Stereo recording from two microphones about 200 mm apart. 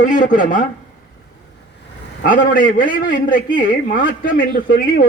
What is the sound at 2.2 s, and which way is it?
Speech, 45° left (ahead or behind).